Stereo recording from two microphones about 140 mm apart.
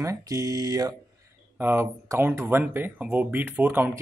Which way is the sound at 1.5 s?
15° right (ahead or behind).